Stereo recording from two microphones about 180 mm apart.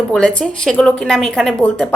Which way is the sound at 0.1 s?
5° left (ahead or behind).